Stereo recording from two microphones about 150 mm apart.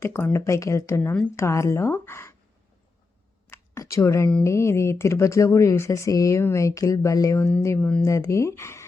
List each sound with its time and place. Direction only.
0.0 s speech: 15° left (ahead or behind)
3.4 s a sound: 20° left (ahead or behind)
4.4 s speech: 20° left (ahead or behind)